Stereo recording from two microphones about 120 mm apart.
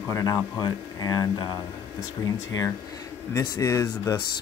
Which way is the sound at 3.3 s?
25° left (ahead or behind).